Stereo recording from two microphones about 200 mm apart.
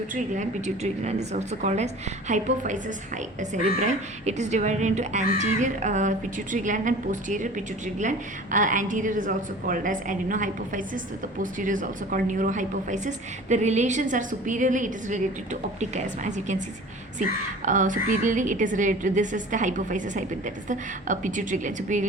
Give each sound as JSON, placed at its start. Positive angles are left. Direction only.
{"t": 0.1, "sound": "a woman's voice", "side_deg": -35}
{"t": 17.7, "sound": "a woman's voice", "side_deg": -40}